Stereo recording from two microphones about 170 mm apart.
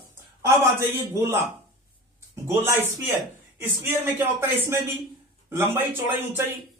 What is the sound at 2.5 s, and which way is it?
A man's voice, 15° right (ahead or behind).